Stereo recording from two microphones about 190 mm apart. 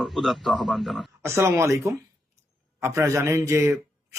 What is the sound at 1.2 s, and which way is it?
A man's voice, 15° right (ahead or behind).